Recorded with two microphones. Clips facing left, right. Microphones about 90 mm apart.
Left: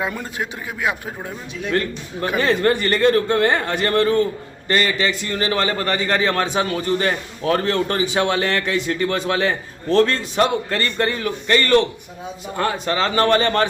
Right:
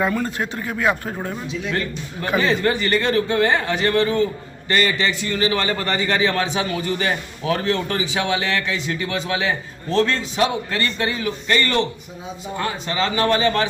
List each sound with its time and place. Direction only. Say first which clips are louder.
0.1 s speech: right 4 dB; 15° left (ahead or behind)
1.6 s a man's voice: left 6 dB; 50° left (ahead or behind)